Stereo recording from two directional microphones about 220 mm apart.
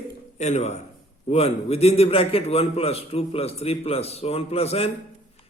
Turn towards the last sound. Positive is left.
turn(degrees=25)  # may be behind; listen again after turning